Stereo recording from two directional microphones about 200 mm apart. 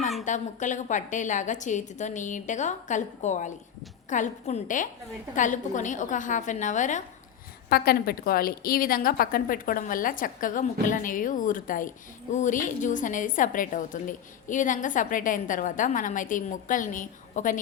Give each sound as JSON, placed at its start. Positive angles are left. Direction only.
{"t": 0.3, "sound": "a woman's voice", "side_deg": 40}
{"t": 7.7, "sound": "a woman's voice", "side_deg": 50}